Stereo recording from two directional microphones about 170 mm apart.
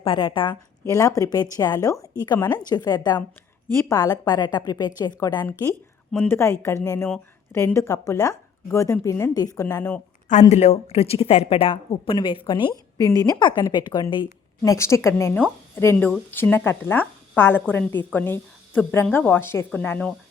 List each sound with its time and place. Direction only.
0.0 s a woman's voice: 30° left (ahead or behind)
10.5 s a woman's voice: 40° left (ahead or behind); by 20.1 s 10° left (ahead or behind)